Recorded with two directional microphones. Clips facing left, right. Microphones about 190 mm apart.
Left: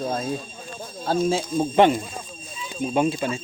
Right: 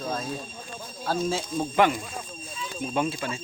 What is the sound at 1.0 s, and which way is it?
Speech, 20° left (ahead or behind).